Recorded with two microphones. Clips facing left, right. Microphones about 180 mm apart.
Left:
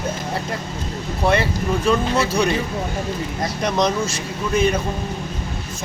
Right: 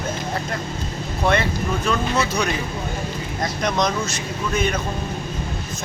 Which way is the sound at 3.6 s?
30° left (ahead or behind).